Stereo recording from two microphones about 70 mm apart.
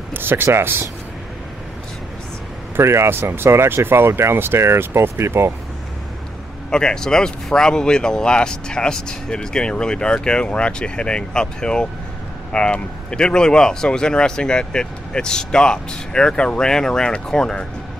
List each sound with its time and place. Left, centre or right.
0.1 s speech: right
2.7 s speech: right
6.7 s speech: centre